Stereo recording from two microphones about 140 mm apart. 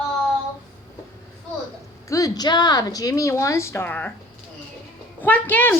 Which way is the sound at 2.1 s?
25° left (ahead or behind).